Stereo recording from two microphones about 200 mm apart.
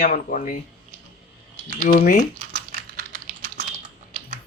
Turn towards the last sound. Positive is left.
turn(degrees=-45)  # may be behind; listen again after turning